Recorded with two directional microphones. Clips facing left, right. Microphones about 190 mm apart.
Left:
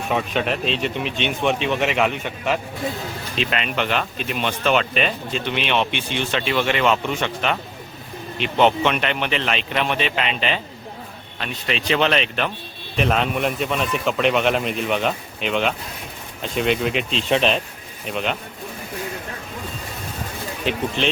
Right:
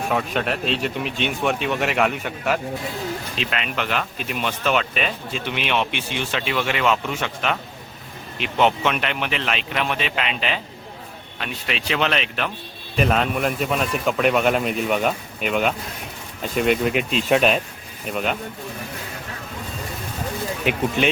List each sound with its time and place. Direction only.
0.3 s speech: 5° right (ahead or behind)
20.7 s speech: 10° right (ahead or behind)